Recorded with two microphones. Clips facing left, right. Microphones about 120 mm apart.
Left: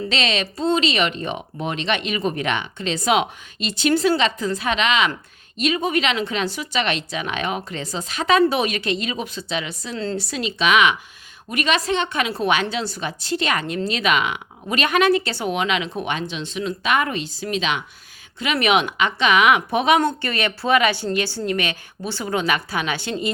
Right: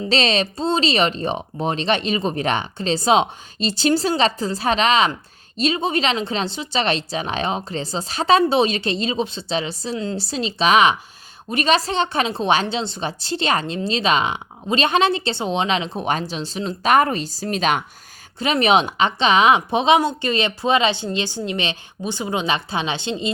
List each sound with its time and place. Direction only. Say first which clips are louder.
0.1 s a woman's voice: right 8 dB; 35° right (ahead or behind)
18.3 s a woman's voice: right 2 dB; 30° right (ahead or behind)